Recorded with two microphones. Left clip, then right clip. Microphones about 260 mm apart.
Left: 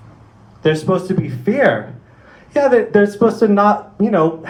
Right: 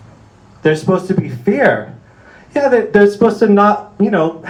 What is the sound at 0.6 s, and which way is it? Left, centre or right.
Speech, right.